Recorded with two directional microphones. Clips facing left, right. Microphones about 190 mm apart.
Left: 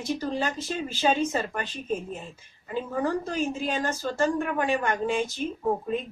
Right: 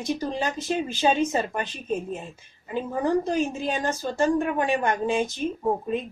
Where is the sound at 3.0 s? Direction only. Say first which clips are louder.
Right 6 dB; 15° right (ahead or behind).